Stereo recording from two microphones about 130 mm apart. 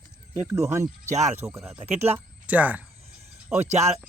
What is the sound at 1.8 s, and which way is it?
Speech, 50° right (ahead or behind).